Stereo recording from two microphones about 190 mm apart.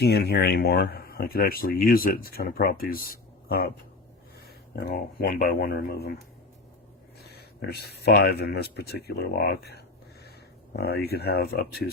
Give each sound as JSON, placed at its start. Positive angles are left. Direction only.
{"t": 0.0, "sound": "speech", "side_deg": 60}
{"t": 4.7, "sound": "speech", "side_deg": 55}
{"t": 7.2, "sound": "speech", "side_deg": 55}